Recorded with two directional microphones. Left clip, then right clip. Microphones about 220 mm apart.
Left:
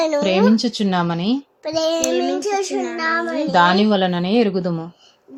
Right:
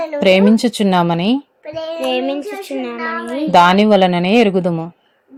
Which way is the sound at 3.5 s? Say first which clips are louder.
Right 6 dB; 20° right (ahead or behind).